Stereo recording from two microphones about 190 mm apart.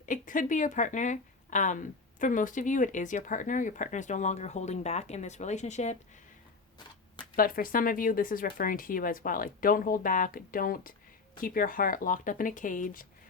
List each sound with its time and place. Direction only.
0.0 s speech: 45° left (ahead or behind)
7.3 s speech: 50° left (ahead or behind)